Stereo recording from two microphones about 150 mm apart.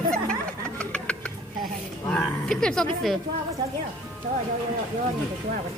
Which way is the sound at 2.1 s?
5° left (ahead or behind).